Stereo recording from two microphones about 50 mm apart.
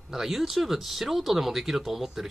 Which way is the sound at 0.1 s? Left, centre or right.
Centre.